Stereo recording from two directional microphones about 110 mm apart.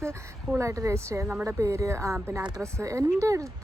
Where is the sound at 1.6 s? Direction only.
30° right (ahead or behind).